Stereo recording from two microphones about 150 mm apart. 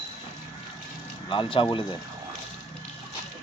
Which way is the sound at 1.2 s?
35° left (ahead or behind).